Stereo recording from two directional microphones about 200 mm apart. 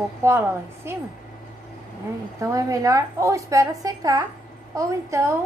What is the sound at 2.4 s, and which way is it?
A woman's voice, 15° right (ahead or behind).